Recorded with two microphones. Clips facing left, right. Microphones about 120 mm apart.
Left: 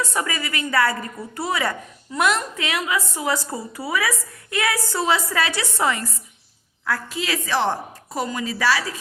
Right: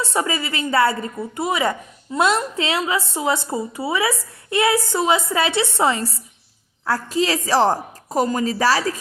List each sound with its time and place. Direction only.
0.0 s a woman's voice: 25° right (ahead or behind)